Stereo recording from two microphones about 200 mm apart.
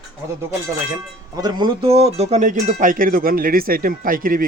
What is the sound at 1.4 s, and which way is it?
Speech, 25° right (ahead or behind).